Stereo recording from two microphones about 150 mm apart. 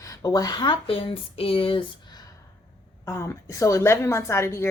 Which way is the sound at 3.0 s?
20° left (ahead or behind).